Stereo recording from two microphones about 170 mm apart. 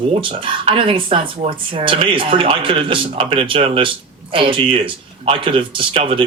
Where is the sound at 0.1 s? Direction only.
30° right (ahead or behind).